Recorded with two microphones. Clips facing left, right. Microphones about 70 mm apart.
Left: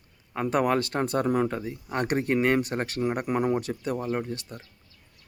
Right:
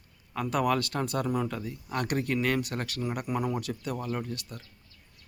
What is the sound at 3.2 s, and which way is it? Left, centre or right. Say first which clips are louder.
Speech: left 5 dB; left.